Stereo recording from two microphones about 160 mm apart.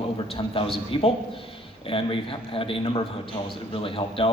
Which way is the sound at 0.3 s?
35° left (ahead or behind).